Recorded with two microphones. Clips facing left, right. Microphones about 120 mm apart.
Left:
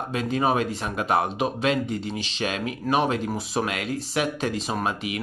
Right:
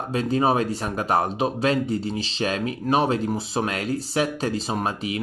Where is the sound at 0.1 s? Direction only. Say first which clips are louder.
Right 3 dB; 35° right (ahead or behind).